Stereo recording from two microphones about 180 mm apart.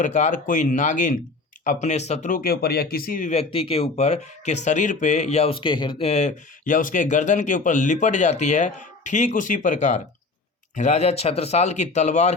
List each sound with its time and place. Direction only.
0.0 s a man's voice: 40° left (ahead or behind)